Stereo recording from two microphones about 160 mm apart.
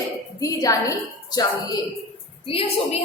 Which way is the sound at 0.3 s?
20° left (ahead or behind).